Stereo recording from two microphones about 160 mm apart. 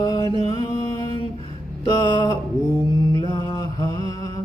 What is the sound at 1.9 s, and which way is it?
Mantra, 30° left (ahead or behind).